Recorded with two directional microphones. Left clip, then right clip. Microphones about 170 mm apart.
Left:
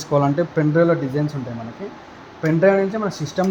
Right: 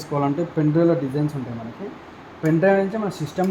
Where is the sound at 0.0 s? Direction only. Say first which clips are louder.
Left 5 dB; 40° left (ahead or behind).